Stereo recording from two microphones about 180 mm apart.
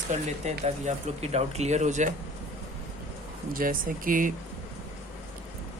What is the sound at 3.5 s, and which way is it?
Speech, 50° right (ahead or behind).